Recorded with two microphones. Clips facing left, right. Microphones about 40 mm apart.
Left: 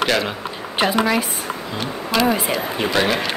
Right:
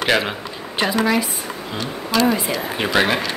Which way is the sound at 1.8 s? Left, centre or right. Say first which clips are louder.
Even; left.